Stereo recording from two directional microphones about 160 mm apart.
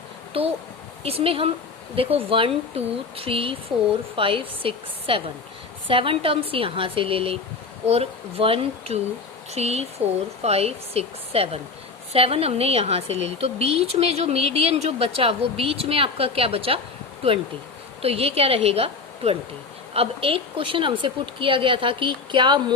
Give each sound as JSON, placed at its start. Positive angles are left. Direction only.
{"t": 0.4, "sound": "a woman's voice", "side_deg": -35}
{"t": 18.0, "sound": "a woman's voice", "side_deg": -40}